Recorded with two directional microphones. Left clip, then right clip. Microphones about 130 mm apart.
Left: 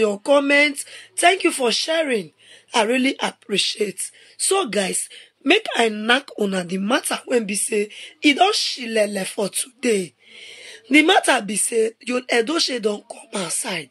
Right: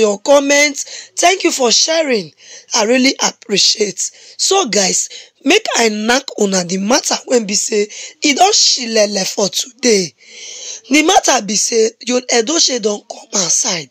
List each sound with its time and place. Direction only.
0.0 s a woman's voice: 30° right (ahead or behind)